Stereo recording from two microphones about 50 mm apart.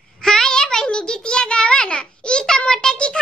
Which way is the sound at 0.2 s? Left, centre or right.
Centre.